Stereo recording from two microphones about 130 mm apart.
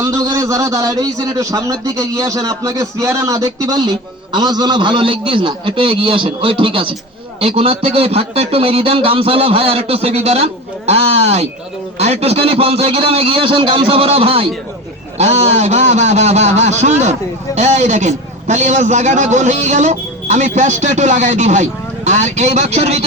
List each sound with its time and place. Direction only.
0.0 s a man's voice: 25° right (ahead or behind); by 14.5 s 45° right (ahead or behind)
15.2 s speech: 60° right (ahead or behind)